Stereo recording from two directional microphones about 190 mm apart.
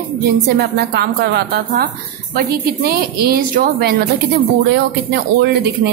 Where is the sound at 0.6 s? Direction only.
55° right (ahead or behind).